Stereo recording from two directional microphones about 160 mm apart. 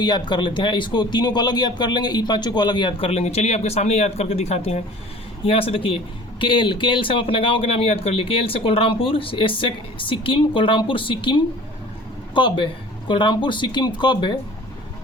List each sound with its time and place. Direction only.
0.0 s speech: 25° left (ahead or behind)